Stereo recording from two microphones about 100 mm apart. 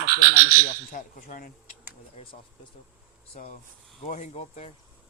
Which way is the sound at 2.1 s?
65° left (ahead or behind).